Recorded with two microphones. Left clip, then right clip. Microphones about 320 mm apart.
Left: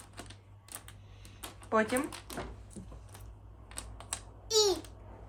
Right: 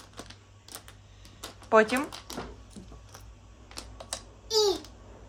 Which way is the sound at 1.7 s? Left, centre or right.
Right.